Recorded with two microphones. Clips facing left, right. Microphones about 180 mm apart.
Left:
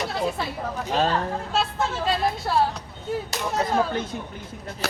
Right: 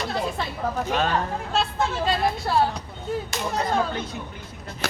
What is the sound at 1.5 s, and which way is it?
Speech, 5° left (ahead or behind).